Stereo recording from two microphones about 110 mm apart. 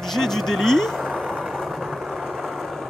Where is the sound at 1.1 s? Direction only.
5° right (ahead or behind).